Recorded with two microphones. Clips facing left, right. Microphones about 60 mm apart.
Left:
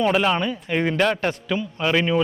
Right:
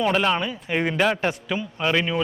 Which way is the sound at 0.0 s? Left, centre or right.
Centre.